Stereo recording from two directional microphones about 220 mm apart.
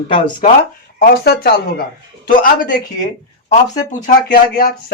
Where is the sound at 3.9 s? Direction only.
35° left (ahead or behind).